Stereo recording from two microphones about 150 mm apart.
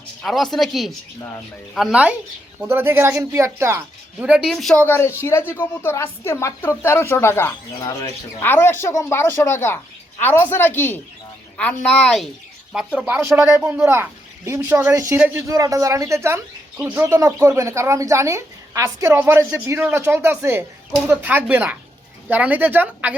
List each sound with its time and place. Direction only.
0.2 s a woman's voice: centre (ahead or behind)
4.9 s a woman's voice: 15° left (ahead or behind); by 13.1 s 5° right (ahead or behind)
13.1 s speech: 20° right (ahead or behind)